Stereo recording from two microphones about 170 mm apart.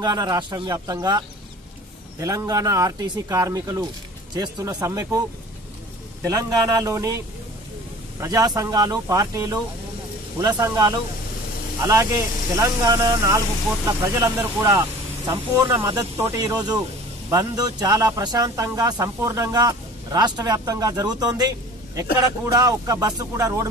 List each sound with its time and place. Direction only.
0.0 s speech: 20° right (ahead or behind)
6.2 s speech: 20° right (ahead or behind)